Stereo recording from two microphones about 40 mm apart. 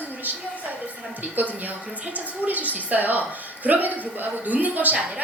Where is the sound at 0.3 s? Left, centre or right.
Right.